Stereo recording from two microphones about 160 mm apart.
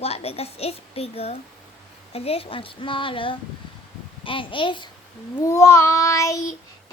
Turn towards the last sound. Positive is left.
turn(degrees=20)  # may be behind; listen again after turning